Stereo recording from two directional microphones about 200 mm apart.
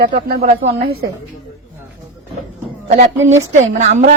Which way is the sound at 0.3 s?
50° right (ahead or behind).